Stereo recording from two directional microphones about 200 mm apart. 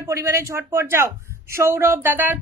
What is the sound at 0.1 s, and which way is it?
Speech, 15° right (ahead or behind).